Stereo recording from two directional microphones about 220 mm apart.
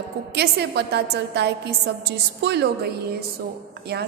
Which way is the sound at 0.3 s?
50° right (ahead or behind).